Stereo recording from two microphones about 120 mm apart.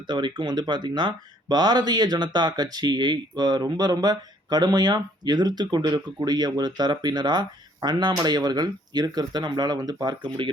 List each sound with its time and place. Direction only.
0.1 s speech: 40° right (ahead or behind)